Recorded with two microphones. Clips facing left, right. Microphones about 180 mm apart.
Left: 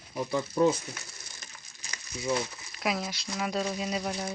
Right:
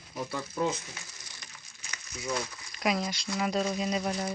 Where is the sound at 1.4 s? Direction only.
35° left (ahead or behind).